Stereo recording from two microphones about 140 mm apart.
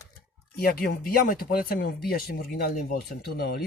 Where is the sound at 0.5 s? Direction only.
90° left.